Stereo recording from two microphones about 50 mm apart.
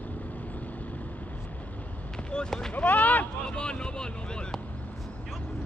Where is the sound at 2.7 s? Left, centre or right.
Left.